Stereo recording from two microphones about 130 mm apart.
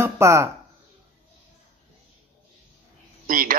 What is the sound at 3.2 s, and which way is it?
Speech, 90° right.